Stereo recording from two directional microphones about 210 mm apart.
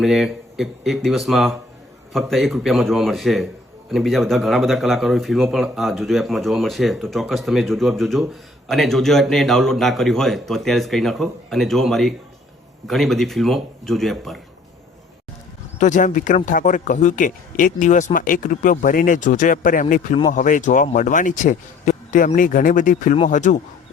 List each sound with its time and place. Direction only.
0.0 s speech: centre (ahead or behind)
15.8 s speech: 35° left (ahead or behind)